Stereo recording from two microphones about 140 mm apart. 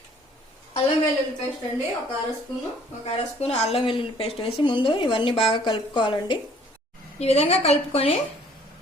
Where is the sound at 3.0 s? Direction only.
50° left (ahead or behind).